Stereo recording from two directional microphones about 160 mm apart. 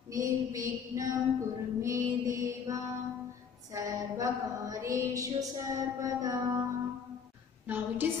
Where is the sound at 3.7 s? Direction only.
20° right (ahead or behind).